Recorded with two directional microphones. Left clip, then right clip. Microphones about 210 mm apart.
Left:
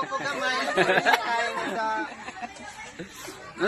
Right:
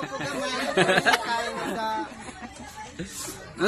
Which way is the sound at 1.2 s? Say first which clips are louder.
Left 1 dB; 35° left (ahead or behind).